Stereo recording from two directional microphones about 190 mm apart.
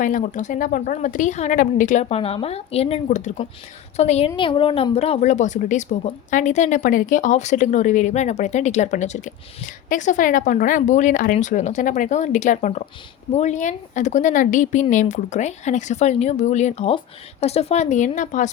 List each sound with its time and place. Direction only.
0.0 s speech: 45° left (ahead or behind)